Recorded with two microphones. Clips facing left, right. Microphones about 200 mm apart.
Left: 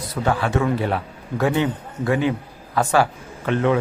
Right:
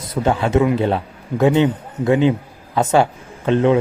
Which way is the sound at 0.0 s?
20° right (ahead or behind).